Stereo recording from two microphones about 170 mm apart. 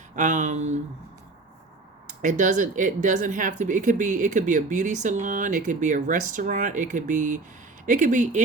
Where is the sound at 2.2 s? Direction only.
45° right (ahead or behind).